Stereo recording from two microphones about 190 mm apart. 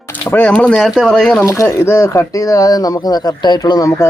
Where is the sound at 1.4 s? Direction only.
15° left (ahead or behind).